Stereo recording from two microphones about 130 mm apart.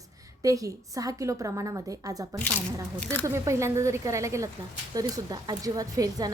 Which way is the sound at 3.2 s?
20° right (ahead or behind).